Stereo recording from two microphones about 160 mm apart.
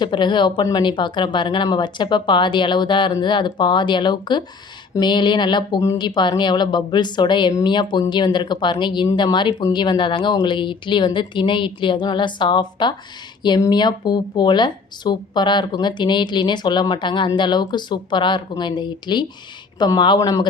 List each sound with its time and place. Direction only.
0.0 s speech: 30° left (ahead or behind)